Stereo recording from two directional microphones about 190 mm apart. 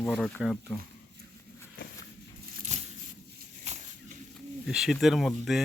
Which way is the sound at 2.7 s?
35° right (ahead or behind).